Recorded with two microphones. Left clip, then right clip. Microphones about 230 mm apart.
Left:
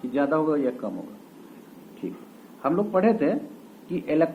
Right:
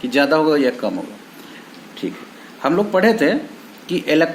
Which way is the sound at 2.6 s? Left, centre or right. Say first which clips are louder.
Right 7 dB; right.